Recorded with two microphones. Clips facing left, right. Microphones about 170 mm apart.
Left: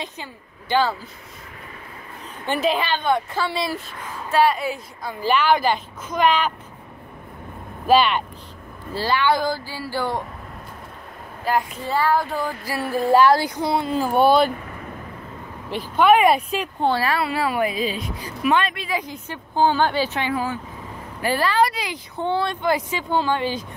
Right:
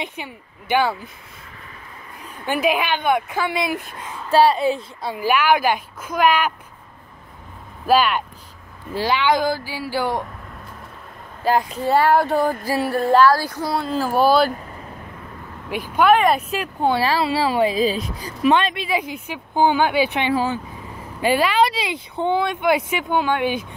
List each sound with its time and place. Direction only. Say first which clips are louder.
0.0 s a woman's voice: right 3 dB; 15° right (ahead or behind)
2.4 s a woman's voice: right 1 dB; 10° right (ahead or behind)
4.3 s a woman's voice: right 4 dB; 30° right (ahead or behind)
5.2 s a woman's voice: right 1 dB; 10° right (ahead or behind)
7.8 s a woman's voice: even; 5° right (ahead or behind)
11.9 s speech: right 4 dB; 65° right (ahead or behind)
12.4 s music: right 7 dB; 45° right (ahead or behind)
13.1 s speech: even; 20° left (ahead or behind)
14.1 s speech: even; centre (ahead or behind)
16.0 s speech: even; 5° left (ahead or behind)
17.0 s a woman's voice: right 3 dB; 25° right (ahead or behind)
18.5 s a woman's voice: right 3 dB; 25° right (ahead or behind)
19.1 s a woman's voice: right 1 dB; 10° right (ahead or behind)
20.2 s a woman's voice: right 4 dB; 25° right (ahead or behind)